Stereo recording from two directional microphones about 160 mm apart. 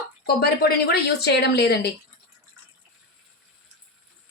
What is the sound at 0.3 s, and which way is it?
Speech, 85° left.